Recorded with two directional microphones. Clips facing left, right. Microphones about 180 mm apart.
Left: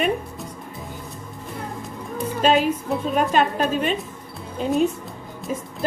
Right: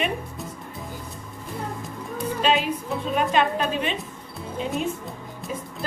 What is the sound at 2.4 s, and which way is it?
Music, 45° left (ahead or behind).